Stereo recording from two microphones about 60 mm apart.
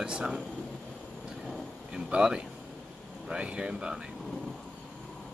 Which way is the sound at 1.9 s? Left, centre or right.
Centre.